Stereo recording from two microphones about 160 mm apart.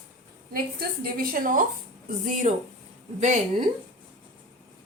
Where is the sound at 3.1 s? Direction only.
50° right (ahead or behind).